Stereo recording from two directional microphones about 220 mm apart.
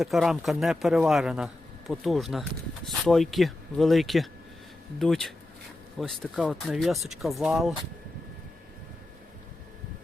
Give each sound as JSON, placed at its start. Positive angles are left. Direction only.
{"t": 0.0, "sound": "speech", "side_deg": 0}